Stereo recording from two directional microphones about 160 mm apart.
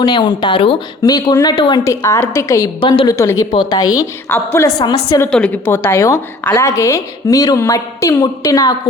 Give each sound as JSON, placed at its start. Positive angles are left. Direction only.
{"t": 0.0, "sound": "a woman's voice", "side_deg": 25}
{"t": 4.8, "sound": "speech", "side_deg": 30}
{"t": 5.2, "sound": "a woman's voice", "side_deg": 10}